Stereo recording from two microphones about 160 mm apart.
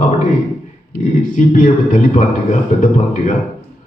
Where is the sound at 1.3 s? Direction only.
50° left (ahead or behind).